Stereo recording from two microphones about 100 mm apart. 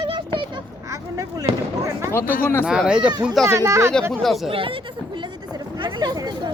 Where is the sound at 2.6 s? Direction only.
10° right (ahead or behind).